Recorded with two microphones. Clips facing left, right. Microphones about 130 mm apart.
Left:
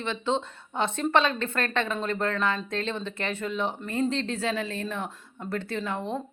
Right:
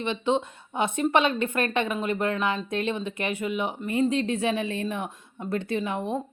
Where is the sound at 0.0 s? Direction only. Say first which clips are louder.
Right 3 dB; 15° right (ahead or behind).